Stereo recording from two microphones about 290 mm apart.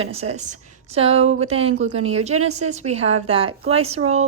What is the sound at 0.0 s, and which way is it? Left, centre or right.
A woman's voice, right.